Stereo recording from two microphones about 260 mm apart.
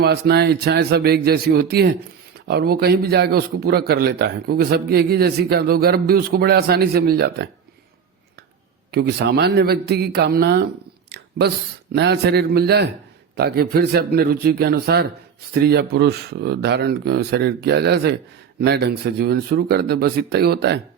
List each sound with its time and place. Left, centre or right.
0.0 s a man's voice: right
8.9 s a man's voice: right